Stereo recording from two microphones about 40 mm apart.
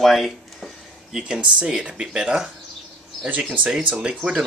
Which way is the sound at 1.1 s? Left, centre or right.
Centre.